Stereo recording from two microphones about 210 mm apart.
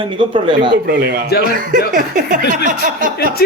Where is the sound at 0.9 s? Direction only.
50° right (ahead or behind).